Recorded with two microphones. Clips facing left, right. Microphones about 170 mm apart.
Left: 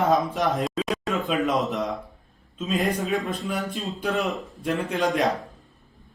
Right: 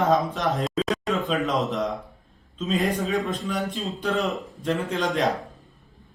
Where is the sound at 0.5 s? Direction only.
5° left (ahead or behind).